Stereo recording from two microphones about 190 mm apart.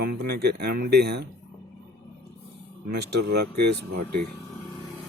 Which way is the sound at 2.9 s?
60° right (ahead or behind).